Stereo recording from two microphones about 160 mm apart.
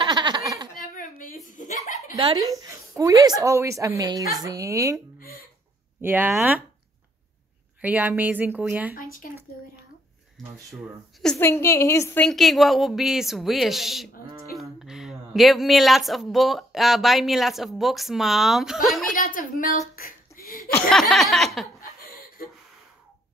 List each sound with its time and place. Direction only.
0.0 s a sound: 25° right (ahead or behind)
0.7 s a sound: 55° left (ahead or behind)
1.5 s chuckle: 50° left (ahead or behind)
2.3 s a woman's voice: 20° right (ahead or behind)
7.8 s speech: 10° right (ahead or behind)
8.9 s speech: 60° left (ahead or behind)
10.7 s speech: centre (ahead or behind)
11.3 s a woman's voice: 15° left (ahead or behind)
12.3 s speech: centre (ahead or behind)
19.1 s a woman's voice: 65° left (ahead or behind)
20.0 s a sound: 65° left (ahead or behind)
20.9 s speech: centre (ahead or behind)